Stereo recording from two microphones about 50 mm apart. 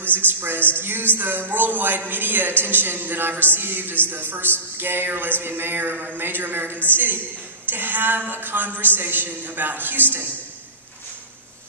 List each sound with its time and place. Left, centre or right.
0.1 s a woman's voice: right